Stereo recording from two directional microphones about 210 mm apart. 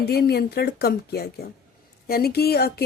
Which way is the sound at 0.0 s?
50° left (ahead or behind).